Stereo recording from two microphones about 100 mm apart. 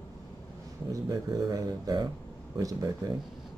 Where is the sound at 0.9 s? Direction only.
40° right (ahead or behind).